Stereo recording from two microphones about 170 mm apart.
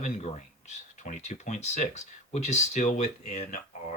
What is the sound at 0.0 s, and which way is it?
Speech, 45° left (ahead or behind).